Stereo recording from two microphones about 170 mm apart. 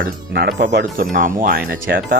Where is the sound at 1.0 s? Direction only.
50° right (ahead or behind).